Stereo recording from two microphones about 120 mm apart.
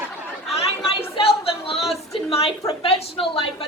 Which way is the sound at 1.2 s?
50° left (ahead or behind).